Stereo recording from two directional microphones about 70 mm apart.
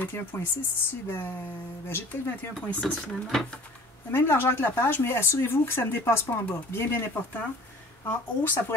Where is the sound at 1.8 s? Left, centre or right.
Left.